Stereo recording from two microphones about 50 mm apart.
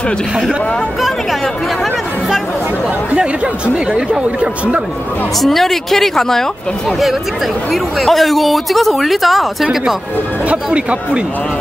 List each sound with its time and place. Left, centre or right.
3.7 s speech: right
5.4 s speech: centre
7.7 s speech: centre
10.5 s speech: right